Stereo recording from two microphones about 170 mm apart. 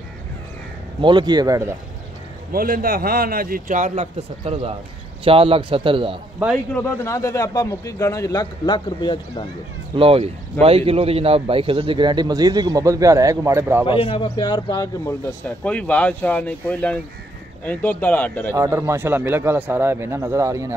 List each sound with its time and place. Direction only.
1.0 s a man's voice: 25° right (ahead or behind)
2.5 s a man's voice: 60° right (ahead or behind); by 6.1 s 30° right (ahead or behind)
6.5 s a man's voice: 10° left (ahead or behind); by 9.5 s 25° left (ahead or behind)
9.9 s a man's voice: 35° right (ahead or behind); by 13.8 s 15° right (ahead or behind)
14.0 s a man's voice: 30° left (ahead or behind)
15.4 s speech: 5° left (ahead or behind)
18.5 s a man's voice: 20° right (ahead or behind)